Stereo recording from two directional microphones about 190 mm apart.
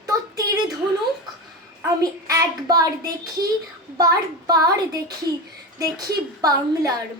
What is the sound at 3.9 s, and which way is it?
A woman's voice, 20° right (ahead or behind).